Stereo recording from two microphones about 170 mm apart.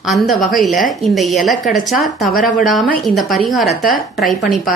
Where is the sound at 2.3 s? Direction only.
55° left (ahead or behind).